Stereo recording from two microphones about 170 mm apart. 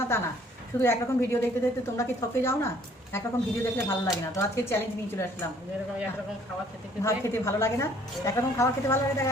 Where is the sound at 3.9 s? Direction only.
15° left (ahead or behind).